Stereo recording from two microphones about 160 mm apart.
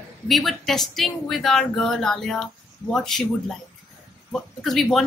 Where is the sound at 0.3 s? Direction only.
Centre (ahead or behind).